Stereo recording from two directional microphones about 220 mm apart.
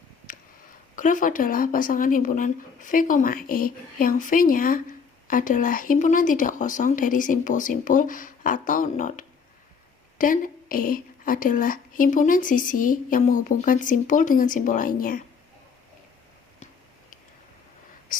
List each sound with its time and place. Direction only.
0.9 s speech: 35° left (ahead or behind)